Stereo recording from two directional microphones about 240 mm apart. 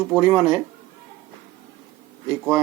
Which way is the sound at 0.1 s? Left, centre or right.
Centre.